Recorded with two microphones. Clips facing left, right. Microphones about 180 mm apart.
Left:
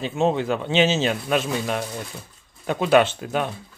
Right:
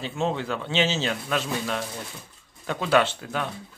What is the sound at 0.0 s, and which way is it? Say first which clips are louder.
Speech: left 6 dB; 20° left (ahead or behind).